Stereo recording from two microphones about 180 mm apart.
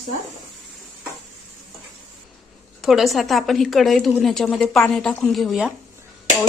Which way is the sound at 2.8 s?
Centre (ahead or behind).